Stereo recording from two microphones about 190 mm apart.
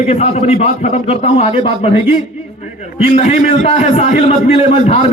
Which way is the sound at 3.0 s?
30° left (ahead or behind).